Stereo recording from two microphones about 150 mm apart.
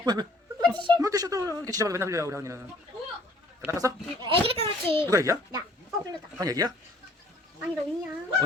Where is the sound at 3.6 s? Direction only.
20° right (ahead or behind).